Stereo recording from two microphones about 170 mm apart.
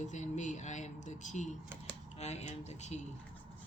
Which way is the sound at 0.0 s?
45° left (ahead or behind).